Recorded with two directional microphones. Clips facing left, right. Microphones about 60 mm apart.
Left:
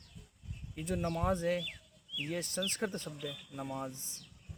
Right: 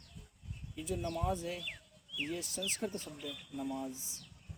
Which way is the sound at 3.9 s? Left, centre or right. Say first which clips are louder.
Right 2 dB; centre.